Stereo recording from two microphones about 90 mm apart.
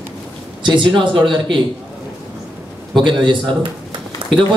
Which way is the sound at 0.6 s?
65° right (ahead or behind).